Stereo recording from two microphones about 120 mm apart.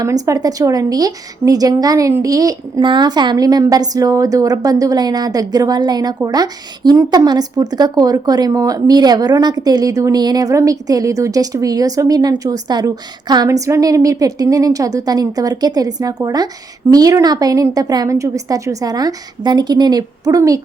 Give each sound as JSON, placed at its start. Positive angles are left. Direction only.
{"t": 0.0, "sound": "speech", "side_deg": -30}